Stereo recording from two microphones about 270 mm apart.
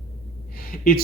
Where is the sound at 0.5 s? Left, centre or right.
Left.